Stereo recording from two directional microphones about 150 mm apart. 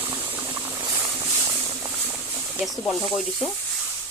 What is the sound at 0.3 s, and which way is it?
Boiling, 15° right (ahead or behind).